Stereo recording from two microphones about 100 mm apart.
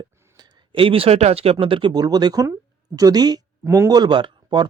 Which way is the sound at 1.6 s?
60° right (ahead or behind).